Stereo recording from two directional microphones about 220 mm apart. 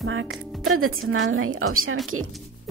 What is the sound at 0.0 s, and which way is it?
Speech, 65° right (ahead or behind).